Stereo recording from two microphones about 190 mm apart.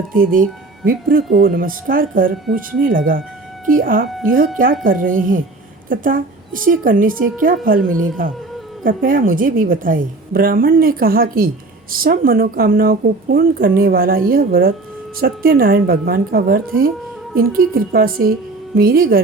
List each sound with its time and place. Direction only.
0.1 s a woman's voice: 45° right (ahead or behind)
8.8 s a woman's voice: 45° right (ahead or behind)